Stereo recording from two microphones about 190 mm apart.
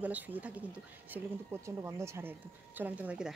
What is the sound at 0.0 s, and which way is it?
Speech, 10° right (ahead or behind).